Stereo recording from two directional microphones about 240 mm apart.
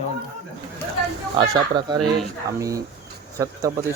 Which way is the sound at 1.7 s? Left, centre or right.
Centre.